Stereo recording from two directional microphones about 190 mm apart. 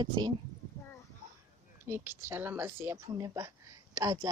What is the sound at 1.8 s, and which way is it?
Speech, 10° right (ahead or behind).